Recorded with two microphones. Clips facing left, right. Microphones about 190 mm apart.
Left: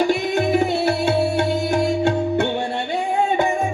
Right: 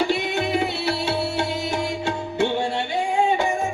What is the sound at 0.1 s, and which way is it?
Music, 45° left (ahead or behind).